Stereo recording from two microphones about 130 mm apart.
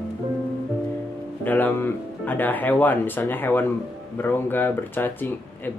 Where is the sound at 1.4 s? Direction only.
15° left (ahead or behind).